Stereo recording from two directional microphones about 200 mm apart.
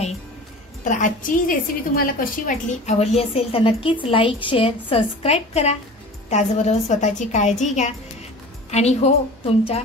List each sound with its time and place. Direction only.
0.8 s a woman's voice: 40° left (ahead or behind)